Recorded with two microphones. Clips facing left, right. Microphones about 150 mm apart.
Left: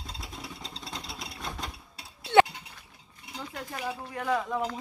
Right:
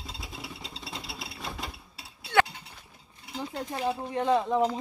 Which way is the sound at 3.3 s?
25° right (ahead or behind).